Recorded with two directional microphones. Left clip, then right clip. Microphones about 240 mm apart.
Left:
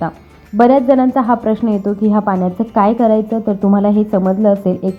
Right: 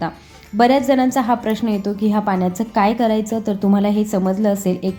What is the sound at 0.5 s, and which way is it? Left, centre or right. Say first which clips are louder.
A woman's voice: left 4 dB; centre.